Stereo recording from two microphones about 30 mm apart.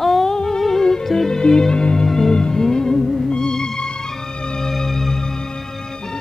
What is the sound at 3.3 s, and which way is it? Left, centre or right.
Music, left.